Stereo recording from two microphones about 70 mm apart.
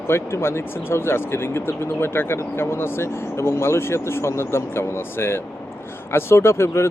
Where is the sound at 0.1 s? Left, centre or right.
Left.